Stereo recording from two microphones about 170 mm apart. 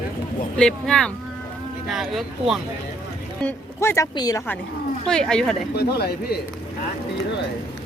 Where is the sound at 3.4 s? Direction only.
15° left (ahead or behind).